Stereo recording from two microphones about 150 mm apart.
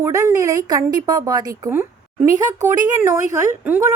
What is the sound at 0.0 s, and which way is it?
A woman's voice, 20° right (ahead or behind).